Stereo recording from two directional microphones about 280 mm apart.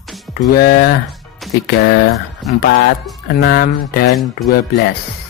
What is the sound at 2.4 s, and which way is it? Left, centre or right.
Speech, centre.